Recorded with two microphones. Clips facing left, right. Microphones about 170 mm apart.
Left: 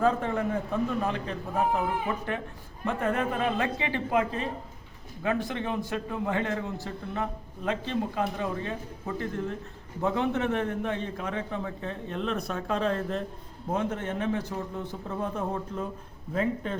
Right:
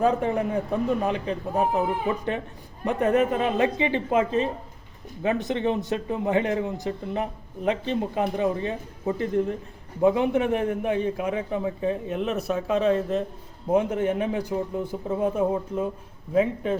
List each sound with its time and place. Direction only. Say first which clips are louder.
0.0 s a man's voice: right 3 dB; 15° right (ahead or behind)
2.8 s a man's voice: right 6 dB; 20° right (ahead or behind)